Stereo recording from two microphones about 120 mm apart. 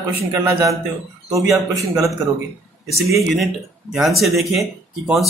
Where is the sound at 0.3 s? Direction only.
25° right (ahead or behind).